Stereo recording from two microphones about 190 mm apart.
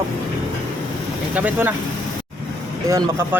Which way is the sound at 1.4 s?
10° right (ahead or behind).